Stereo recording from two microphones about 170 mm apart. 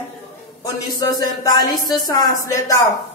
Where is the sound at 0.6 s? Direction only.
20° left (ahead or behind).